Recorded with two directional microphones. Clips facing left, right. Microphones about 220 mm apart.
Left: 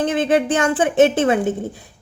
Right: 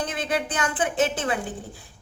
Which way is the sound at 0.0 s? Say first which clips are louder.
Left 10 dB; 30° left (ahead or behind).